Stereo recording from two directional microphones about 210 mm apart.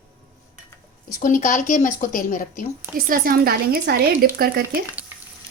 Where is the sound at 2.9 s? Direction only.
45° right (ahead or behind).